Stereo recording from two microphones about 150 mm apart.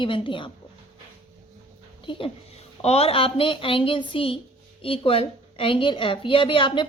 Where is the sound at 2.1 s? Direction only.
35° left (ahead or behind).